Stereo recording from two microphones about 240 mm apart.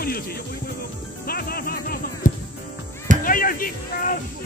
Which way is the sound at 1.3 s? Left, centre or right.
Left.